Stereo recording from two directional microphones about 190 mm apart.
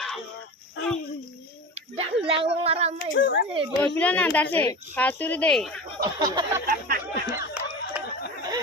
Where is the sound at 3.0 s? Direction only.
75° left (ahead or behind).